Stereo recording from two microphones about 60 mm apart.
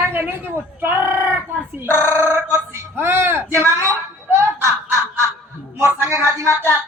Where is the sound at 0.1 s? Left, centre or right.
Right.